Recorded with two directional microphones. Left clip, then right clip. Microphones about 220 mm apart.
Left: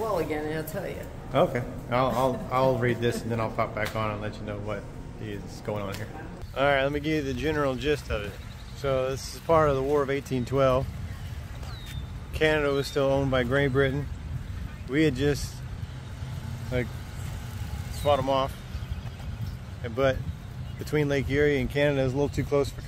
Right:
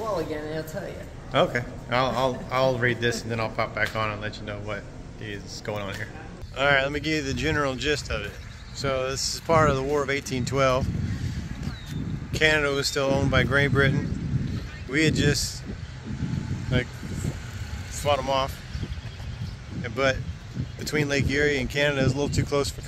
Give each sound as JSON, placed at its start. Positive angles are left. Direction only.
{"t": 1.3, "sound": "a man's voice", "side_deg": 0}
{"t": 12.3, "sound": "a man's voice", "side_deg": 5}
{"t": 18.0, "sound": "a man's voice", "side_deg": 0}
{"t": 19.8, "sound": "a man's voice", "side_deg": 5}